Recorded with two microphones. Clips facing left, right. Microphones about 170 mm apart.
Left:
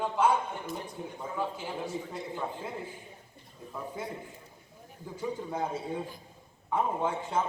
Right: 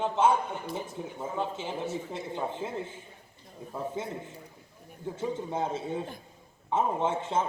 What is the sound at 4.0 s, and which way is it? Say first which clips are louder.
Speech: right 1 dB; 25° right (ahead or behind).